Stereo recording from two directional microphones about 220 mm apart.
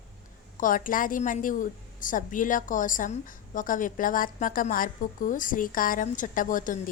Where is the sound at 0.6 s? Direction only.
40° left (ahead or behind).